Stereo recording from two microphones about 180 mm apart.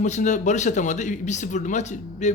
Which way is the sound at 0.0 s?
40° left (ahead or behind).